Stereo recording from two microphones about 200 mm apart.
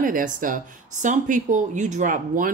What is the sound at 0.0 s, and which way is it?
Speech, 40° right (ahead or behind).